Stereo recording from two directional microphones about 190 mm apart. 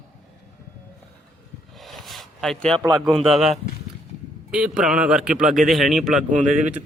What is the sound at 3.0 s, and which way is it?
Speech, centre (ahead or behind).